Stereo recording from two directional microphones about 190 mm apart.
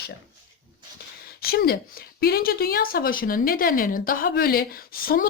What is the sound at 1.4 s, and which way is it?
Speech, 55° left (ahead or behind).